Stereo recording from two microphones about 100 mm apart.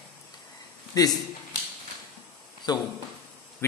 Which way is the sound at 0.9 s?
40° left (ahead or behind).